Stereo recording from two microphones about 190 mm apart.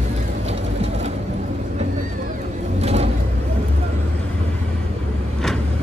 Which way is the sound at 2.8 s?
35° right (ahead or behind).